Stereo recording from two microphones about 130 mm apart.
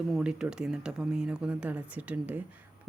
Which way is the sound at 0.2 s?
5° right (ahead or behind).